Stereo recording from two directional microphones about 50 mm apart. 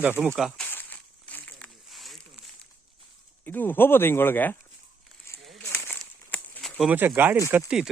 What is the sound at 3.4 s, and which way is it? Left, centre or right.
Speech, left.